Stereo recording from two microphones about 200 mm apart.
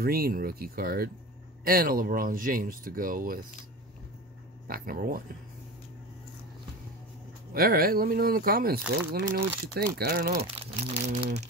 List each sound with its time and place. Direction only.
0.0 s speech: 50° right (ahead or behind)
4.6 s speech: 45° right (ahead or behind)
7.5 s speech: 50° right (ahead or behind)
10.6 s speech: 30° right (ahead or behind)